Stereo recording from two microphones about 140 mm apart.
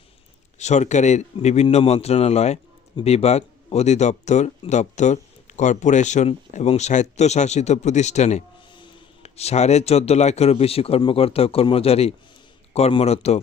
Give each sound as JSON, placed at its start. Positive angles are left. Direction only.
{"t": 0.6, "sound": "speech", "side_deg": 55}
{"t": 8.7, "sound": "speech", "side_deg": 35}